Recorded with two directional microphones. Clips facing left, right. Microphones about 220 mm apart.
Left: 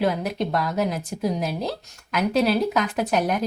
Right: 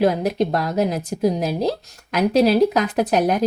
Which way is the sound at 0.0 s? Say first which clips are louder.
Right 5 dB; 40° right (ahead or behind).